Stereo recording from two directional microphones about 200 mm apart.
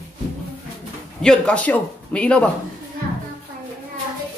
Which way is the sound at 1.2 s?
5° left (ahead or behind).